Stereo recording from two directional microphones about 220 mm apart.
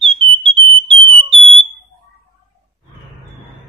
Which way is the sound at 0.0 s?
25° right (ahead or behind).